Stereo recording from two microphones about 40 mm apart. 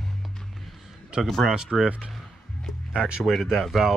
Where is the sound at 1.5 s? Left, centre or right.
Centre.